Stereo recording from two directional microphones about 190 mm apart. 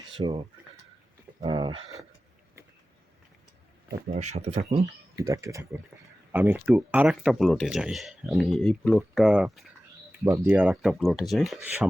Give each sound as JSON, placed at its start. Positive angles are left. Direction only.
{"t": 0.1, "sound": "speech", "side_deg": -30}
{"t": 4.1, "sound": "speech", "side_deg": -35}
{"t": 5.3, "sound": "speech", "side_deg": -15}